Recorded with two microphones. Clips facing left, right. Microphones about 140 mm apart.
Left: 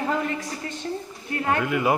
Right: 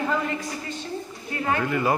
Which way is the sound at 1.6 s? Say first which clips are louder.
Even; 10° left (ahead or behind).